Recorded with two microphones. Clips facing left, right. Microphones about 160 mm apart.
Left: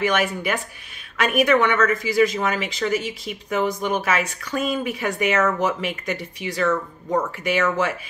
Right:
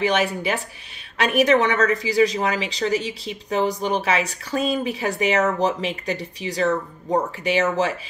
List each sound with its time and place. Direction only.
0.0 s a woman's voice: 30° right (ahead or behind)